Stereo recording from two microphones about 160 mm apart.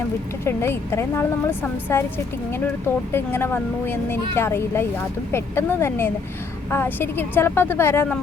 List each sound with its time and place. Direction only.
0.4 s speech: 15° left (ahead or behind)